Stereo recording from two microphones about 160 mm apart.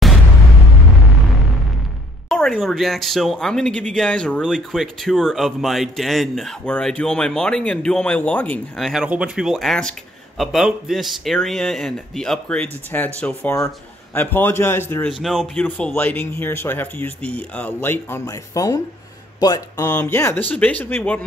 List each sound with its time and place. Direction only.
2.2 s speech: 5° left (ahead or behind)
15.0 s speech: centre (ahead or behind)